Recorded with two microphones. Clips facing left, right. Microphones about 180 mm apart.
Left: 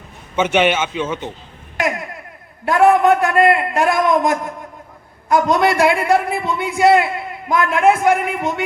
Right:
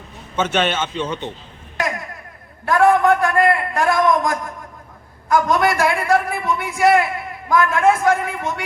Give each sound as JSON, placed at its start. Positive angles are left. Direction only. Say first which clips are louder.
{"t": 0.3, "sound": "a man's voice", "louder": "left 4 dB", "side_deg": 10}
{"t": 2.6, "sound": "a man's voice", "louder": "left 2 dB", "side_deg": 20}